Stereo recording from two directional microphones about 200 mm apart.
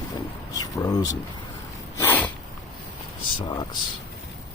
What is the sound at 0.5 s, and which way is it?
Speech, 20° left (ahead or behind).